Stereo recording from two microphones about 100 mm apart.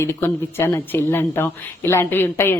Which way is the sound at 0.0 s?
25° left (ahead or behind).